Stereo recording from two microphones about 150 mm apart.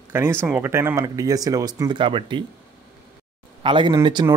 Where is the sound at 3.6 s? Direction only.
35° right (ahead or behind).